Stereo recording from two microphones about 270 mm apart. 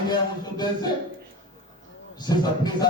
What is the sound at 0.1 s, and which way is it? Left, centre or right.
Speech, centre.